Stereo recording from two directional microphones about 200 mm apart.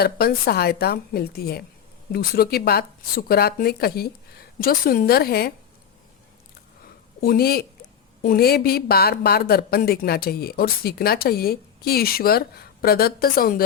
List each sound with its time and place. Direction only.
0.0 s speech: 50° left (ahead or behind)
7.2 s speech: 50° left (ahead or behind)